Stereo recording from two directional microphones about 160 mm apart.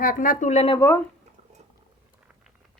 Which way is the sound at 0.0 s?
60° left (ahead or behind).